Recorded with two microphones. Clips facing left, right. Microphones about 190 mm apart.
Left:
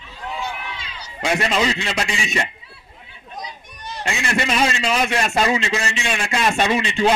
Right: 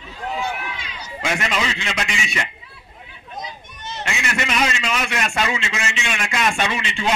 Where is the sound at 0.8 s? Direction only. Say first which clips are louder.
Left 3 dB; 30° left (ahead or behind).